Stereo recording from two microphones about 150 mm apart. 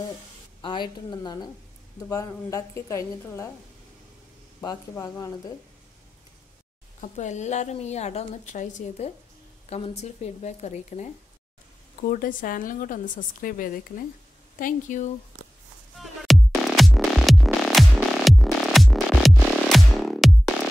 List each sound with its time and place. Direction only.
0.6 s a woman's voice: 30° left (ahead or behind)
4.6 s a woman's voice: 20° left (ahead or behind)
7.0 s a woman's voice: 50° left (ahead or behind)
12.1 s a woman's voice: 65° left (ahead or behind)
16.0 s music: centre (ahead or behind)